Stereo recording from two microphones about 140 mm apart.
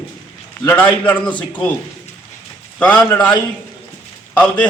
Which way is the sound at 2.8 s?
10° left (ahead or behind).